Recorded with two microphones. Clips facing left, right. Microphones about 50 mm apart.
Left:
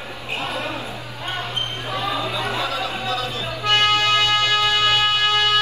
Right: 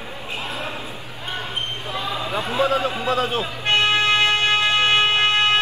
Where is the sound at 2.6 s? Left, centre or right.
Right.